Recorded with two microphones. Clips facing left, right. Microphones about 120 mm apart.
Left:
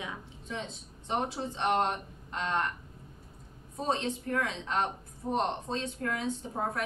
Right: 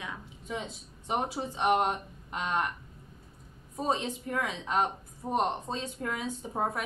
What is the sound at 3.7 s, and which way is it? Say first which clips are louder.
A woman's voice: right 1 dB; 10° right (ahead or behind).